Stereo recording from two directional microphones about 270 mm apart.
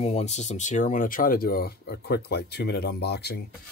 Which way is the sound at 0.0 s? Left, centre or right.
Left.